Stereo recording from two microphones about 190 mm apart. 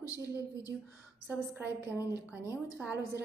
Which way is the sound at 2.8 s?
10° right (ahead or behind).